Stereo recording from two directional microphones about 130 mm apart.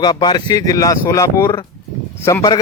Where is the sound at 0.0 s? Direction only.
30° left (ahead or behind).